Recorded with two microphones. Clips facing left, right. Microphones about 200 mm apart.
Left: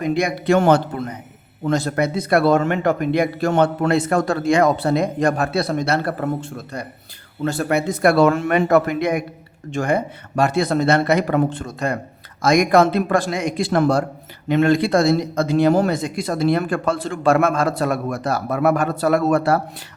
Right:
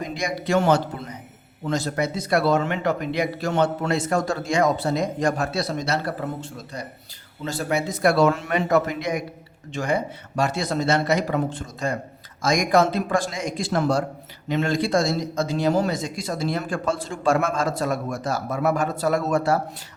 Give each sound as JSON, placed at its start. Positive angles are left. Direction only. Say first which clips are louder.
{"t": 0.0, "sound": "a man's voice", "louder": "left 7 dB", "side_deg": 60}